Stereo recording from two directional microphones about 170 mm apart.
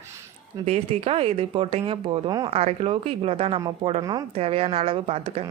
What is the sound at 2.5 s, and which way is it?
Speech, 35° right (ahead or behind).